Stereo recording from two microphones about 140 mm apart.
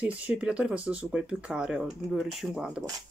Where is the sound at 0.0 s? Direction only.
10° right (ahead or behind).